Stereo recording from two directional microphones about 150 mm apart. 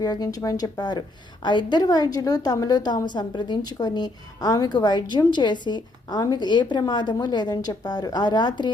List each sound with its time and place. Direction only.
0.0 s a woman's voice: 25° left (ahead or behind)